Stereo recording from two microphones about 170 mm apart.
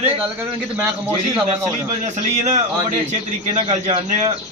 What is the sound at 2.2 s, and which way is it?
A man's voice, 45° right (ahead or behind).